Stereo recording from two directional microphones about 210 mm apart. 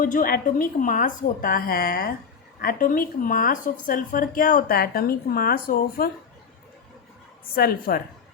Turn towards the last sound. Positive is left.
turn(degrees=45)  # may be behind; listen again after turning